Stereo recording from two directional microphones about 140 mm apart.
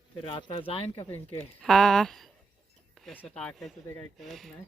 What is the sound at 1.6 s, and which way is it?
Speech, centre (ahead or behind).